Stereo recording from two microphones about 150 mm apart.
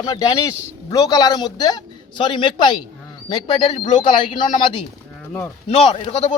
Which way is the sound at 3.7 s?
55° left (ahead or behind).